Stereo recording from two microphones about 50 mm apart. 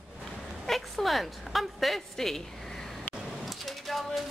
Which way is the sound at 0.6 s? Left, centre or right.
Centre.